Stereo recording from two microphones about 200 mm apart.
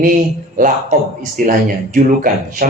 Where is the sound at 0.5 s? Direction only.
40° right (ahead or behind).